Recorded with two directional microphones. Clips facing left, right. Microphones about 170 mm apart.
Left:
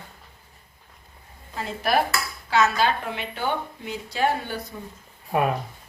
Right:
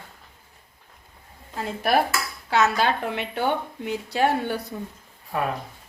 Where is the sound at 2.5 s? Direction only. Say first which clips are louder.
Even; 60° right (ahead or behind).